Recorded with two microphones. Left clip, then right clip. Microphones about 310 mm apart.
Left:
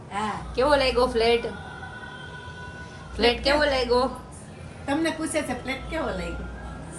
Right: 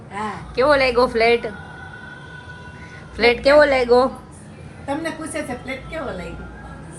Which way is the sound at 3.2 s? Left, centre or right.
Centre.